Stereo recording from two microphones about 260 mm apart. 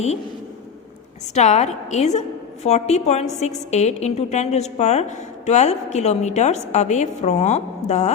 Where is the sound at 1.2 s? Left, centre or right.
Left.